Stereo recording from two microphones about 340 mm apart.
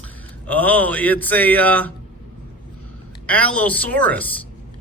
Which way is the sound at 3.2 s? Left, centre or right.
Centre.